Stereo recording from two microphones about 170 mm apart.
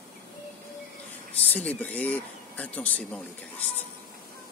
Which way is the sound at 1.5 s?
10° left (ahead or behind).